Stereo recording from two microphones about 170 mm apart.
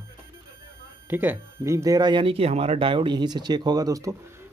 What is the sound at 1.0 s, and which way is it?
Speech, 10° right (ahead or behind).